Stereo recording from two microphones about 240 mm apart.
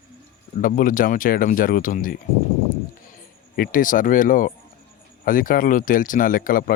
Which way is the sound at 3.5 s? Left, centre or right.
Left.